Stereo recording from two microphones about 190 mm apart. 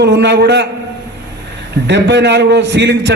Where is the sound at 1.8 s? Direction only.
65° right (ahead or behind).